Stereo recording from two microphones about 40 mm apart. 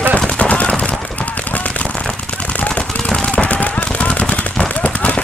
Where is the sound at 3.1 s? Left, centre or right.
Left.